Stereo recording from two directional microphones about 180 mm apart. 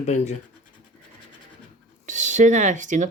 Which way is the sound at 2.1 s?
45° right (ahead or behind).